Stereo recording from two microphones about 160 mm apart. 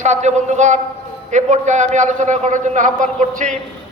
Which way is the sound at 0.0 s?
45° right (ahead or behind).